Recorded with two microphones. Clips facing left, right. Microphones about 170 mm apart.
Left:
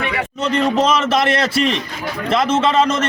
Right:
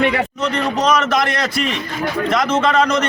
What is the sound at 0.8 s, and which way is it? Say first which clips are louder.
A man's voice: right 3 dB; 30° left (ahead or behind).